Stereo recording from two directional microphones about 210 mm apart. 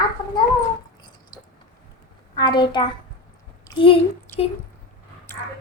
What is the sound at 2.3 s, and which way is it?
Speech, 20° left (ahead or behind).